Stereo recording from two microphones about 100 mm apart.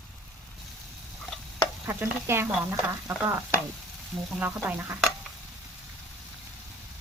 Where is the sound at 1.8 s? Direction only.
20° right (ahead or behind).